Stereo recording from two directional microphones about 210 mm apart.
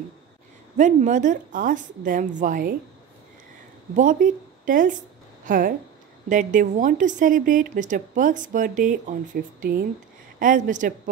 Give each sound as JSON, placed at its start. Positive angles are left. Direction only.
{"t": 0.7, "sound": "a woman's voice", "side_deg": -35}
{"t": 3.9, "sound": "a woman's voice", "side_deg": -40}